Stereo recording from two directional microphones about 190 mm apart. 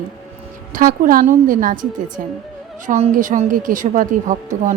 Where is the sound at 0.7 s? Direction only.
45° right (ahead or behind).